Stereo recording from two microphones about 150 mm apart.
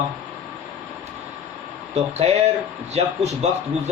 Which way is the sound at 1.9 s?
45° right (ahead or behind).